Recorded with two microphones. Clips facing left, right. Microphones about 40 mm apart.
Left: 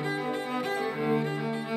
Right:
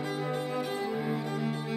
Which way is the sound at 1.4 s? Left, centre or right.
Left.